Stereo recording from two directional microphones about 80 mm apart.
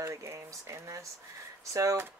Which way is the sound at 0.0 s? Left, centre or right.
Right.